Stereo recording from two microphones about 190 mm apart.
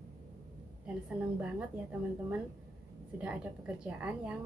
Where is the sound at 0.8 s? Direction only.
5° right (ahead or behind).